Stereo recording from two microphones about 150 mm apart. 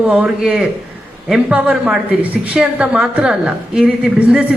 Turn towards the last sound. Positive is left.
turn(degrees=-5)  # may be behind; listen again after turning